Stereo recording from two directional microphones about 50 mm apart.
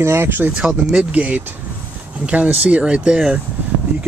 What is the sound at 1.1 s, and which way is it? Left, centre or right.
Speech, right.